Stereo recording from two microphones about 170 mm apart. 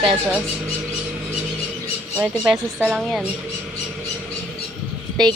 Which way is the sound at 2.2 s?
5° right (ahead or behind).